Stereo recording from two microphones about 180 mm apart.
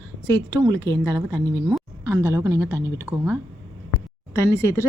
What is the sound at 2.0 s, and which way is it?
Speech, 15° right (ahead or behind).